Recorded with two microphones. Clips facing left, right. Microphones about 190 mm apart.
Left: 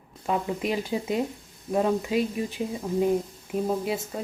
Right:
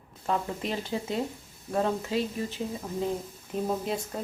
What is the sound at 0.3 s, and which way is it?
Speech, 10° left (ahead or behind).